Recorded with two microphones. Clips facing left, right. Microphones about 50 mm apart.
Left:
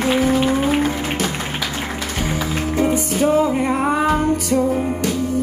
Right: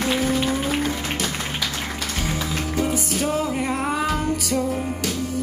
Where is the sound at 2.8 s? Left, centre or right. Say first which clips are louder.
Left 6 dB; centre.